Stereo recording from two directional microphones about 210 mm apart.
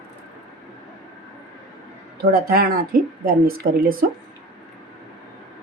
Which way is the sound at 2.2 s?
45° right (ahead or behind).